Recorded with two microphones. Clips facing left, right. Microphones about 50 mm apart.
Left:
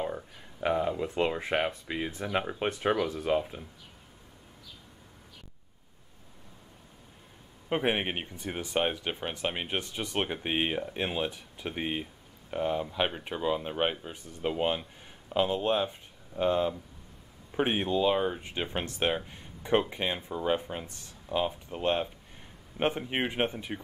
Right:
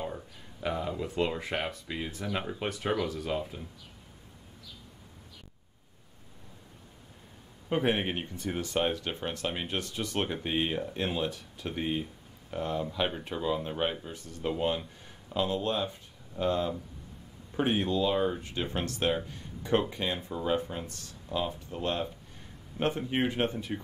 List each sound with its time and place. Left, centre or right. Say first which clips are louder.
0.0 s speech: left 3 dB; centre
7.7 s speech: even; left